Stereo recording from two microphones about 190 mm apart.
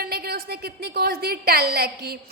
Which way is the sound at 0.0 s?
55° right (ahead or behind).